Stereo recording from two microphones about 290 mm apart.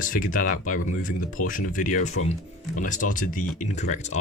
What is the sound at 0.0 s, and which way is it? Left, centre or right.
Speech, left.